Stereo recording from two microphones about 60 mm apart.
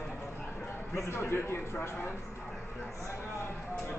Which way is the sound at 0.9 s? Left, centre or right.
Left.